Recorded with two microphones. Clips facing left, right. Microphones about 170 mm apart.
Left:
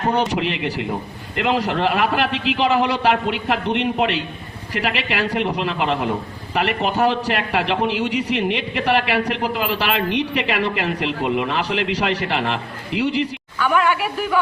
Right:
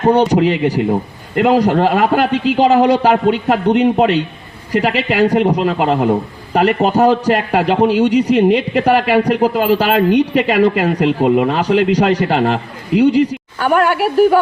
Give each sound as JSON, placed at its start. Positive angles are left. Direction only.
{"t": 0.1, "sound": "a man's voice", "side_deg": -40}